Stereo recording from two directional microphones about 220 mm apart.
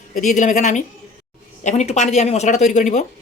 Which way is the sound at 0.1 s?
35° left (ahead or behind).